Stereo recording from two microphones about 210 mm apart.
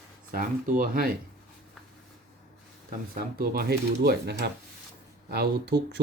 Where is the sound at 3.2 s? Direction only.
45° right (ahead or behind).